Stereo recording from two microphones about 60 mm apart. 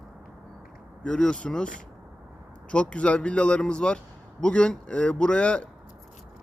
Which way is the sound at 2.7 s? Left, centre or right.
Centre.